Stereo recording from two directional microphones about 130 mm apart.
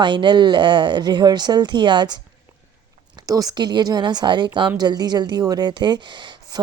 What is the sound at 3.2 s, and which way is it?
Speech, 30° right (ahead or behind).